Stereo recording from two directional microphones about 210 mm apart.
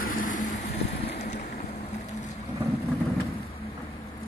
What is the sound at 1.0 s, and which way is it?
Boat, 50° left (ahead or behind).